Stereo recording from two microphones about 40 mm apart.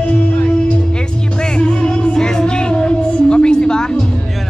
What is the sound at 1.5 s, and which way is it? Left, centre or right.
Music, left.